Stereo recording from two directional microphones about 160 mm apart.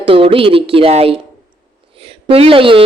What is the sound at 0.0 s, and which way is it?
A woman's voice, 35° right (ahead or behind).